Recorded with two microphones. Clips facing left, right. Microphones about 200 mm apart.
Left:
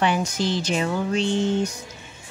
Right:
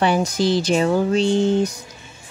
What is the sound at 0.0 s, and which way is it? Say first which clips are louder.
Speech: right 4 dB; 35° right (ahead or behind).